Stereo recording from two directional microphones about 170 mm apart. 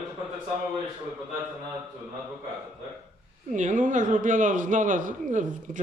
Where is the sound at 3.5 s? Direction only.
45° right (ahead or behind).